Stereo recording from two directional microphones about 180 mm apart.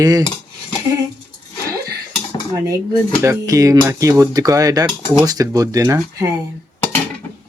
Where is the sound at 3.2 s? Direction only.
15° right (ahead or behind).